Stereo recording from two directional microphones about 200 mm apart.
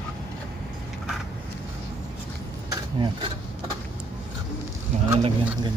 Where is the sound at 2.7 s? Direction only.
25° right (ahead or behind).